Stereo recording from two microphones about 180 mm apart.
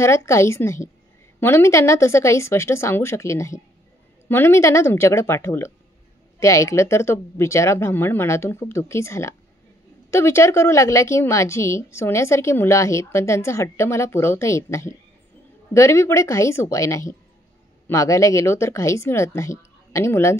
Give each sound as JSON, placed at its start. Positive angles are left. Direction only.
{"t": 0.0, "sound": "a woman's voice", "side_deg": 15}